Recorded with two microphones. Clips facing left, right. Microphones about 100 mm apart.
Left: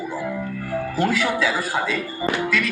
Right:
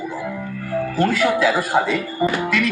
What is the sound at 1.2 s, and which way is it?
A man's voice, 5° right (ahead or behind).